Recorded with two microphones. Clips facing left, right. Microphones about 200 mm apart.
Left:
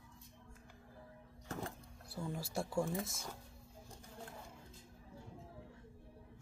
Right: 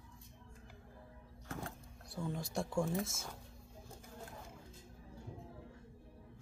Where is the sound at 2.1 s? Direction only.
5° left (ahead or behind).